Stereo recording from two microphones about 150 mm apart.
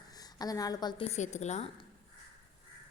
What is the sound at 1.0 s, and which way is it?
Speech, 50° left (ahead or behind).